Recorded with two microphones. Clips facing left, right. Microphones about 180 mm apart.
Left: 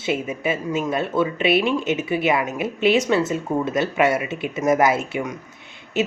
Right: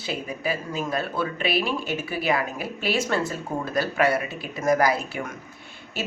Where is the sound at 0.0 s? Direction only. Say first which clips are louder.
Left 6 dB; 25° left (ahead or behind).